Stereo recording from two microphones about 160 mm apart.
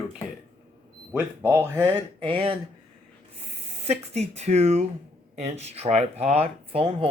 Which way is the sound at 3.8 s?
40° right (ahead or behind).